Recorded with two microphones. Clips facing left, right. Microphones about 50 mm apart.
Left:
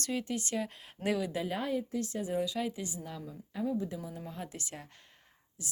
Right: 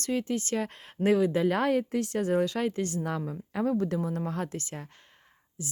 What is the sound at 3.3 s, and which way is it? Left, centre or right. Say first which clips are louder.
Speech: right 3 dB; right.